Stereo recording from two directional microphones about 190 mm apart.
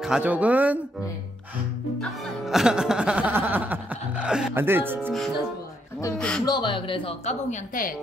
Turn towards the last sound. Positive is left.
turn(degrees=45)  # may be behind; listen again after turning